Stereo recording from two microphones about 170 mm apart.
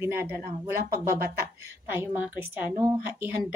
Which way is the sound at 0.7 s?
15° right (ahead or behind).